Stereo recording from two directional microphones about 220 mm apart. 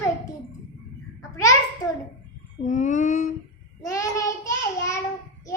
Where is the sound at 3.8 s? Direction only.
15° left (ahead or behind).